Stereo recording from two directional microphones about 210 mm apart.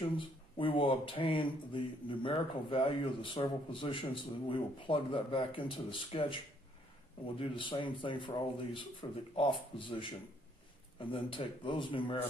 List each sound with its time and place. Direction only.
0.2 s speech: 25° left (ahead or behind)